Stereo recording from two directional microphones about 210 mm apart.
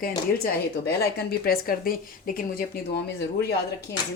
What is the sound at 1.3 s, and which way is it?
A woman's voice, 45° left (ahead or behind).